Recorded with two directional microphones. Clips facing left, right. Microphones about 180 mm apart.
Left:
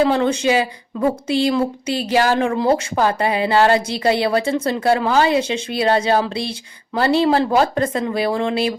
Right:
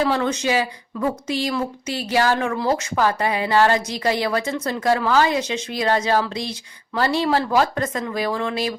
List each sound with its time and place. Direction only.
0.0 s speech: 30° left (ahead or behind)